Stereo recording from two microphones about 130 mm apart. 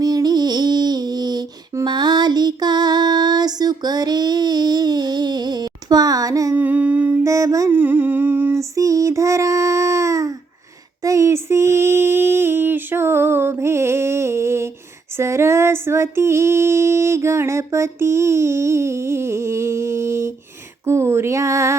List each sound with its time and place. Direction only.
0.0 s a sound: 30° right (ahead or behind)
6.6 s humming: 10° right (ahead or behind)
7.3 s female singing: 25° right (ahead or behind)
7.7 s humming: 15° right (ahead or behind)
8.7 s child singing: 25° right (ahead or behind)
11.0 s a sound: 25° right (ahead or behind)
15.2 s female singing: 20° right (ahead or behind)